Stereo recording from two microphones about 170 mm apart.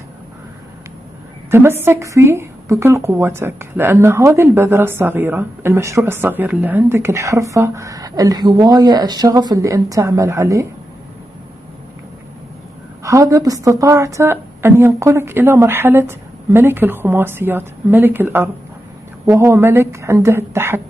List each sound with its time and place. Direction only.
1.5 s a woman's voice: 15° right (ahead or behind)
13.0 s a woman's voice: 20° right (ahead or behind)